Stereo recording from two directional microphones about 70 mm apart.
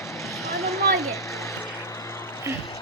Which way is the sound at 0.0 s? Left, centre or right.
Left.